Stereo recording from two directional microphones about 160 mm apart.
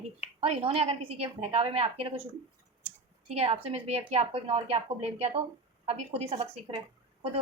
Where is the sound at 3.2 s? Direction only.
40° right (ahead or behind).